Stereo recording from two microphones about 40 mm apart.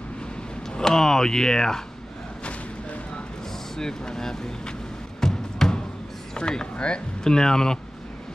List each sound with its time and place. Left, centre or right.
0.7 s speech: centre
3.7 s speech: centre
5.2 s music: centre
6.3 s speech: left